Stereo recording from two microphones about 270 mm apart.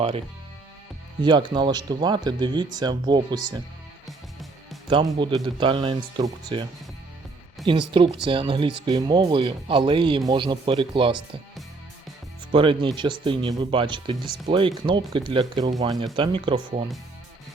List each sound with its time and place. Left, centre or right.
1.2 s speech: centre
4.0 s music: centre
4.9 s speech: centre
7.7 s speech: centre
12.5 s speech: centre